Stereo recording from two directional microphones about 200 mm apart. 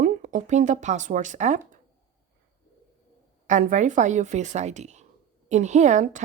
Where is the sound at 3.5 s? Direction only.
40° right (ahead or behind).